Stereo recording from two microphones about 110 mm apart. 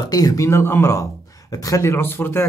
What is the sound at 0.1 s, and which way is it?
Speech, 35° left (ahead or behind).